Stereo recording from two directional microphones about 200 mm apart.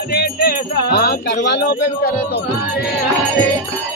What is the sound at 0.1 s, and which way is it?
Music, 50° left (ahead or behind).